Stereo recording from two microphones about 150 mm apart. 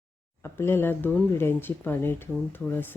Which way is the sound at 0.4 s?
15° left (ahead or behind).